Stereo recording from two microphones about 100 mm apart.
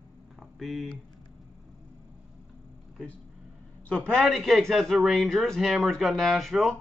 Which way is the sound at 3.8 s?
10° left (ahead or behind).